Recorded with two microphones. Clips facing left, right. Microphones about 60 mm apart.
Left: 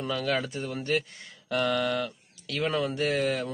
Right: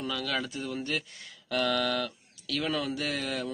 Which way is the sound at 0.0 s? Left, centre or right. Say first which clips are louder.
Left 4 dB; left.